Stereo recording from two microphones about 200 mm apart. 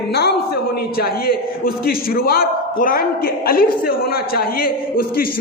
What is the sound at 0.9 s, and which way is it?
A woman's voice, 50° left (ahead or behind).